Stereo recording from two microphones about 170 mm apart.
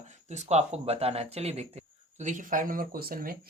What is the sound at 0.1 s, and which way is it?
Speech, 40° right (ahead or behind).